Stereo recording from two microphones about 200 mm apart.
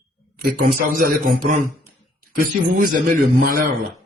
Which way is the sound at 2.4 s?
45° right (ahead or behind).